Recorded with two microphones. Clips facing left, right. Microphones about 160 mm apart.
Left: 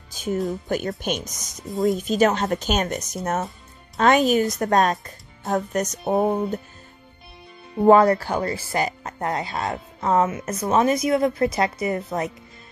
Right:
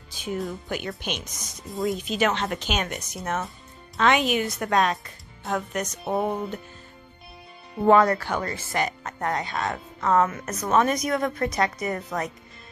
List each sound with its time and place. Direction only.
0.1 s music: 45° left (ahead or behind)
0.5 s a woman's voice: 40° left (ahead or behind)
1.7 s speech: centre (ahead or behind)
2.0 s a woman's voice: 45° left (ahead or behind)
7.8 s speech: 30° left (ahead or behind)